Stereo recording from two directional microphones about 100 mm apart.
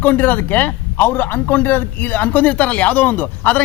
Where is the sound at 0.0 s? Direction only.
20° left (ahead or behind).